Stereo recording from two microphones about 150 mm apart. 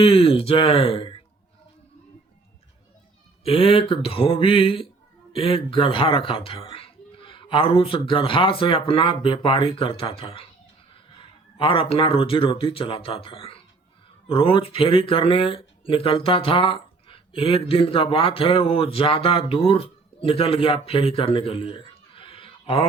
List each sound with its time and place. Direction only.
0.0 s speech: 40° left (ahead or behind)
3.4 s a man's voice: 40° left (ahead or behind)